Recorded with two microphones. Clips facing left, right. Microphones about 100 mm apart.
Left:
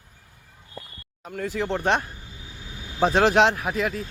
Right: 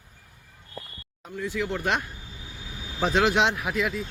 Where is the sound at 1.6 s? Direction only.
35° left (ahead or behind).